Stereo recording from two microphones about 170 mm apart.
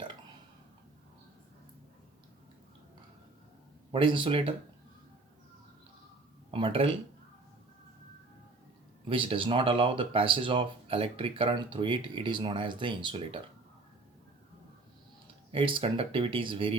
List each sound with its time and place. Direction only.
3.9 s speech: 30° right (ahead or behind)
6.5 s speech: 30° right (ahead or behind)
9.0 s speech: 30° right (ahead or behind)
15.5 s speech: 30° right (ahead or behind)